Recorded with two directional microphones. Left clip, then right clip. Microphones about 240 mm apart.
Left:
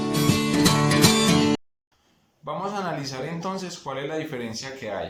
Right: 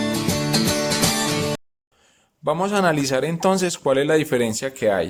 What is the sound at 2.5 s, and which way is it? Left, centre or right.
Speech, right.